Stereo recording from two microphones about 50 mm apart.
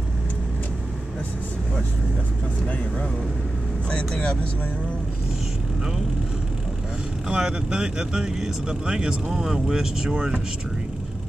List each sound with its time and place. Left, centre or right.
3.9 s speech: left
7.2 s speech: centre